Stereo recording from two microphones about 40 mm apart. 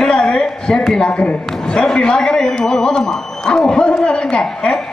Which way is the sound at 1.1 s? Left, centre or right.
Left.